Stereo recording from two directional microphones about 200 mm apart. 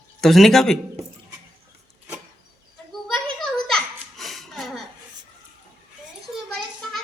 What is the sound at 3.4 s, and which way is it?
Children playing, 5° left (ahead or behind).